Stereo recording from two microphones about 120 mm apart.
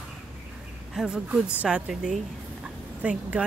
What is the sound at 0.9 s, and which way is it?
Speech, 5° right (ahead or behind).